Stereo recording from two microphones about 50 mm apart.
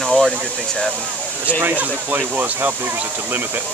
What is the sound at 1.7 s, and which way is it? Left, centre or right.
Speech, right.